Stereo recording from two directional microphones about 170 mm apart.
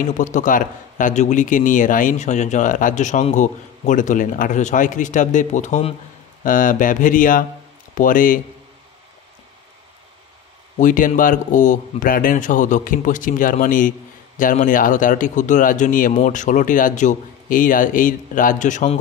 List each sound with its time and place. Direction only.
0.0 s a man's voice: 45° left (ahead or behind)
6.4 s a man's voice: 50° left (ahead or behind)
10.8 s a man's voice: 50° left (ahead or behind)